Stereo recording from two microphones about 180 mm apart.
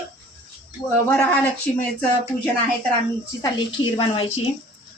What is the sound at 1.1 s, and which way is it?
Speech, 5° left (ahead or behind).